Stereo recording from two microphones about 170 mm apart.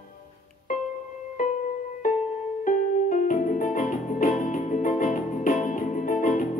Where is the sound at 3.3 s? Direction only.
50° left (ahead or behind).